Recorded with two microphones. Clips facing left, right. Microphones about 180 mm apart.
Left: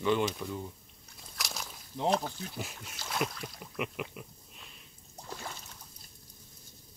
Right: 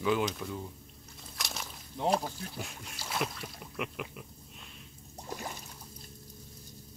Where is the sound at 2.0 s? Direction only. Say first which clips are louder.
Even; 10° right (ahead or behind).